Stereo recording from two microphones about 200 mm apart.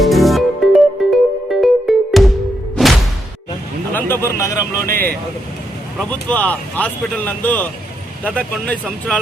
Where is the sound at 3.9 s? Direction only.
10° left (ahead or behind).